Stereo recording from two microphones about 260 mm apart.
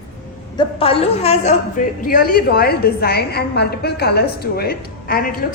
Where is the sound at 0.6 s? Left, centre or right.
Left.